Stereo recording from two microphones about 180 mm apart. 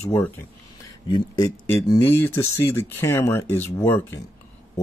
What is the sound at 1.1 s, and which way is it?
Speech, 20° left (ahead or behind).